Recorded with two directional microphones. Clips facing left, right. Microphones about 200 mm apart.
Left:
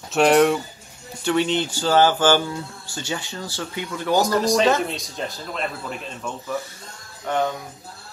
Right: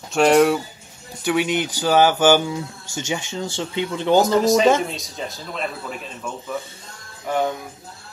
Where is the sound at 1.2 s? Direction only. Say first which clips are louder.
Even; 10° right (ahead or behind).